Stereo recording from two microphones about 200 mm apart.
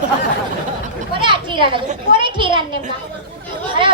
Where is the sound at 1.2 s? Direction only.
25° right (ahead or behind).